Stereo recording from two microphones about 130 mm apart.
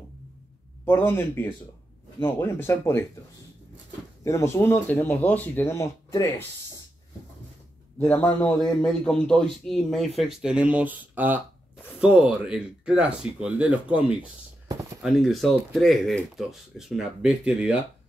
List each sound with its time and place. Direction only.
0.8 s speech: 15° left (ahead or behind)
4.2 s speech: 25° left (ahead or behind)
8.0 s speech: 10° left (ahead or behind); by 17.6 s 5° right (ahead or behind)